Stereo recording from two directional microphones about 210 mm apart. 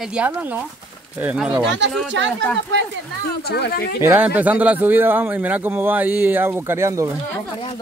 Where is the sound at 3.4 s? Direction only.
50° left (ahead or behind).